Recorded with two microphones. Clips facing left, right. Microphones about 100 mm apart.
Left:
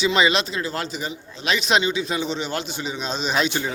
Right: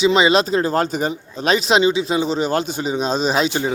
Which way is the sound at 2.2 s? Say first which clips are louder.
Right 7 dB; 40° right (ahead or behind).